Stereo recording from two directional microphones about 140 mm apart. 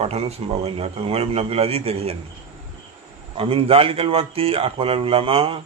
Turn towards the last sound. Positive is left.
turn(degrees=-40)  # may be behind; listen again after turning